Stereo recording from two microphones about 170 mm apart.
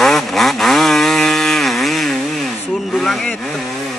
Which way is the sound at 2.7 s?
Centre (ahead or behind).